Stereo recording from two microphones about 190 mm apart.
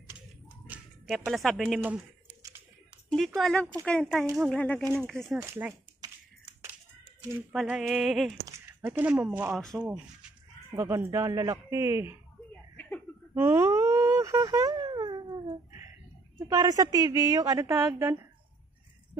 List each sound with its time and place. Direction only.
0.7 s speech: centre (ahead or behind)
2.2 s typing: 15° right (ahead or behind)
3.3 s a sound: centre (ahead or behind)
4.4 s speech: 5° left (ahead or behind)
5.0 s a sound: centre (ahead or behind)
5.4 s a woman's voice: 10° right (ahead or behind)
5.9 s finger snapping: 20° right (ahead or behind)
7.3 s a sound: 5° right (ahead or behind)
8.5 s speech: 15° right (ahead or behind)
10.7 s a woman's voice: 15° right (ahead or behind)
13.3 s a sound: 15° right (ahead or behind)
16.3 s a woman's voice: 20° right (ahead or behind)